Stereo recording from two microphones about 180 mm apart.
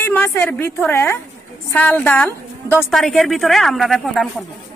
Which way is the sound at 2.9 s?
Centre (ahead or behind).